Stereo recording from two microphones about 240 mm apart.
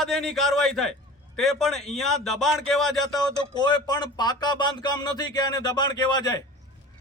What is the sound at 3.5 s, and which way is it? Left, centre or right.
Speech, centre.